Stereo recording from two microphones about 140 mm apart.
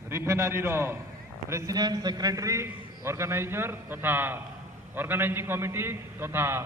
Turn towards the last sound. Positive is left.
turn(degrees=-15)  # may be behind; listen again after turning